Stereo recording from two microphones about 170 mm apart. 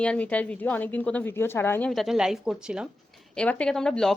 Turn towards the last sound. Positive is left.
turn(degrees=5)  # may be behind; listen again after turning